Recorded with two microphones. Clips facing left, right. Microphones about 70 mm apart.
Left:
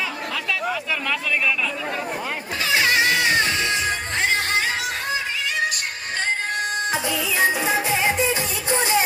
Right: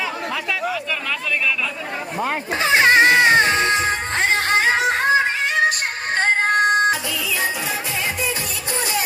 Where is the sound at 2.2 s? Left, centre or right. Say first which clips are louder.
Right 5 dB; right.